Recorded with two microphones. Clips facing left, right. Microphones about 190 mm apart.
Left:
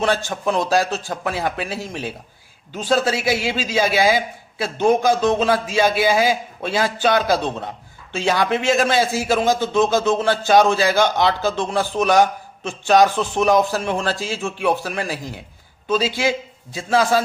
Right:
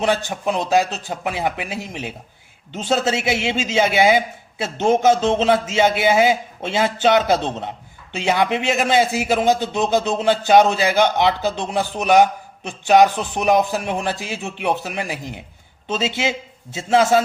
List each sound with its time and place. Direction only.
0.0 s a man's voice: 15° right (ahead or behind)